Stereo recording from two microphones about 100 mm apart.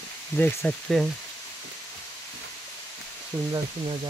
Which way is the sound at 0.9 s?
5° left (ahead or behind).